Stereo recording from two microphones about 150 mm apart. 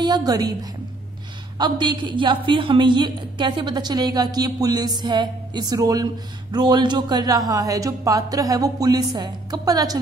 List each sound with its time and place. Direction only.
0.0 s a woman's voice: 25° right (ahead or behind)